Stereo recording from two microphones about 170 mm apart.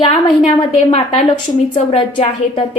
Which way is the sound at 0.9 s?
40° left (ahead or behind).